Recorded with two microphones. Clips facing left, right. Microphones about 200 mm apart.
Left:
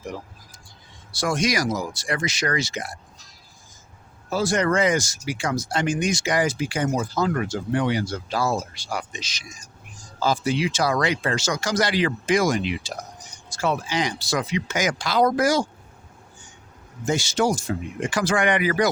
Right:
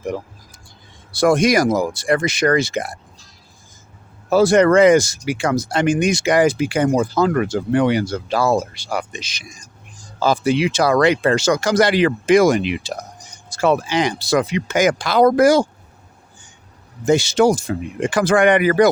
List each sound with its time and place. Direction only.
1.1 s speech: 55° right (ahead or behind)
4.3 s speech: 65° right (ahead or behind)
17.1 s speech: 65° right (ahead or behind)